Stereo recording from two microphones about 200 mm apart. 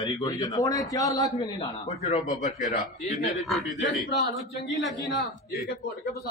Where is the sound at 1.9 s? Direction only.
30° left (ahead or behind).